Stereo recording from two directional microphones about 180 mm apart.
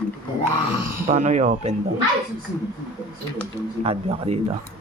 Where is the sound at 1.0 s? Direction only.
40° right (ahead or behind).